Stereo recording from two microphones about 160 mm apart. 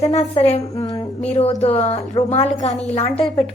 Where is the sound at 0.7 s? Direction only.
20° left (ahead or behind).